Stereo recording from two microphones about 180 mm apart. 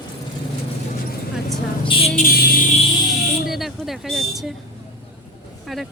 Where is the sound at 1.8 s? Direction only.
30° left (ahead or behind).